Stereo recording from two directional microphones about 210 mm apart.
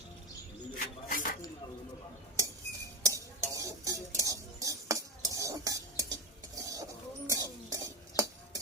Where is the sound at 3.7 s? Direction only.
15° right (ahead or behind).